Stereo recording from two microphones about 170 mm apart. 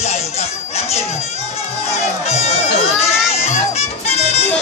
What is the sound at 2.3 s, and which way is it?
Music, 40° left (ahead or behind).